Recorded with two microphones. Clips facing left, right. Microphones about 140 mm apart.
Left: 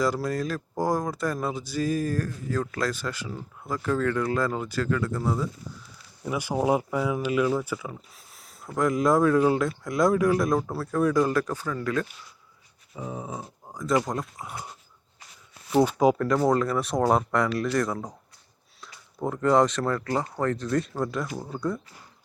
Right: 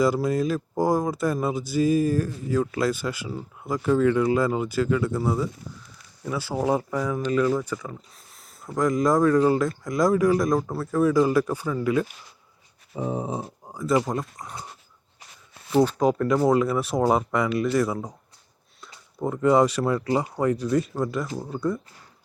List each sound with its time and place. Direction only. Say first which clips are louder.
0.0 s speech: right 4 dB; 5° right (ahead or behind)
6.2 s speech: even; 15° left (ahead or behind); by 12.1 s 10° right (ahead or behind)
12.9 s a sound: right 7 dB; 30° right (ahead or behind)
13.7 s a sound: right 3 dB; 5° right (ahead or behind)
14.0 s speech: right 2 dB; centre (ahead or behind)
15.7 s speech: even; 10° left (ahead or behind)
16.1 s speech: right 2 dB; 5° right (ahead or behind)